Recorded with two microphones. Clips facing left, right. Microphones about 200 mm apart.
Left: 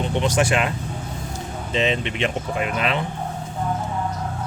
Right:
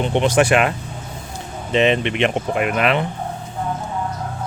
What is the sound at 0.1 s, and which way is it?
Speech, 65° right (ahead or behind).